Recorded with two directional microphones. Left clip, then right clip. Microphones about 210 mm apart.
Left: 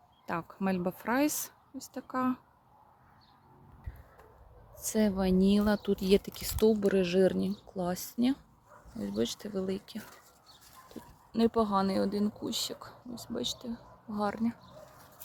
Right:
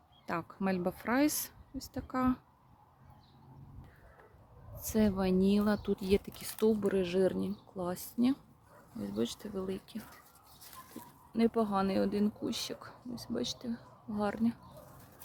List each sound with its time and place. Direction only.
0.3 s speech: 5° left (ahead or behind)
4.8 s speech: 10° left (ahead or behind)
11.3 s speech: 20° left (ahead or behind)